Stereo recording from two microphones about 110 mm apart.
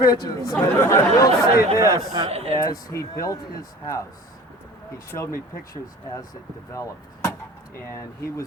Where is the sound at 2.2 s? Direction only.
70° right (ahead or behind).